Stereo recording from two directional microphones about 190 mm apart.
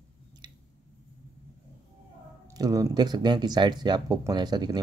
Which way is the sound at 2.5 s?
20° right (ahead or behind).